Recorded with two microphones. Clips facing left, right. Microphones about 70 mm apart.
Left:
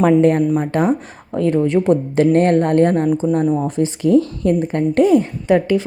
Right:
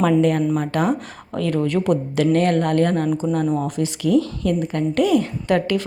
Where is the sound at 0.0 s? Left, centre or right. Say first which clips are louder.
Left 4 dB; left.